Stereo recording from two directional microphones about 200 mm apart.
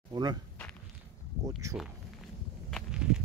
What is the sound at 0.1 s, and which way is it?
Speech, 20° right (ahead or behind).